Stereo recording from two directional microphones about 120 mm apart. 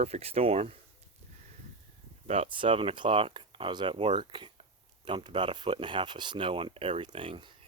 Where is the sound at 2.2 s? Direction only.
50° right (ahead or behind).